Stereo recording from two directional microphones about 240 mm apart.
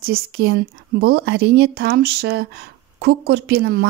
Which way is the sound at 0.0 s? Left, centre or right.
Right.